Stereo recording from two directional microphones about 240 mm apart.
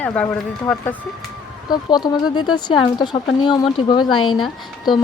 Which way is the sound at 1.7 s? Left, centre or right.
Centre.